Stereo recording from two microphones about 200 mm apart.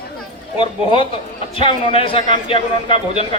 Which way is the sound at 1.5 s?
25° left (ahead or behind).